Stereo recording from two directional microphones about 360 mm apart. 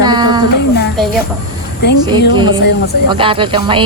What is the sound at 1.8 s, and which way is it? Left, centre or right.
Speech, left.